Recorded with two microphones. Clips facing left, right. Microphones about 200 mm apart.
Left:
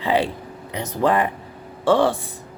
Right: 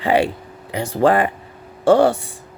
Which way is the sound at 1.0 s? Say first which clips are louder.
Right 4 dB; 90° right.